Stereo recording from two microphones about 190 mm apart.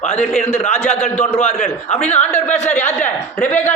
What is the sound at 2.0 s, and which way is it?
Speech, 35° left (ahead or behind).